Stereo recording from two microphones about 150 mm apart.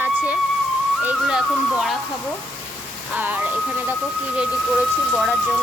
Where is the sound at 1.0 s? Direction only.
5° right (ahead or behind).